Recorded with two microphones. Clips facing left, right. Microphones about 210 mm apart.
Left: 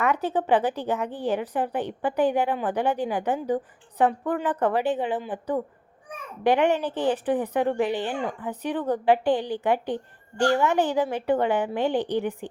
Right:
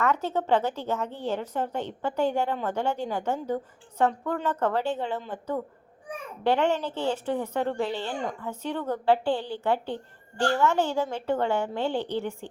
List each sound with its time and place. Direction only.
0.0 s a woman's voice: 15° left (ahead or behind)